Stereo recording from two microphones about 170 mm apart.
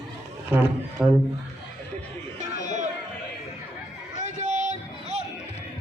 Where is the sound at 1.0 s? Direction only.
5° right (ahead or behind).